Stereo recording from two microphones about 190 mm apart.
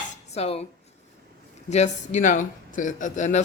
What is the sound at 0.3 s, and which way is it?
Speech, 30° left (ahead or behind).